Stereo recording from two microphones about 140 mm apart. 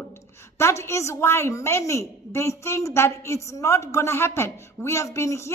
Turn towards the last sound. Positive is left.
turn(degrees=20)  # may be behind; listen again after turning